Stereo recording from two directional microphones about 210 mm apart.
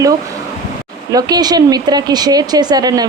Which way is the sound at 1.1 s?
20° right (ahead or behind).